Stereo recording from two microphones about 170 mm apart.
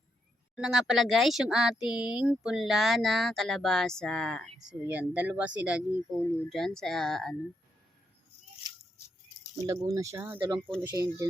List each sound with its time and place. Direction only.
0.5 s speech: 5° right (ahead or behind)
4.6 s speech: 10° right (ahead or behind)
9.6 s speech: 20° right (ahead or behind)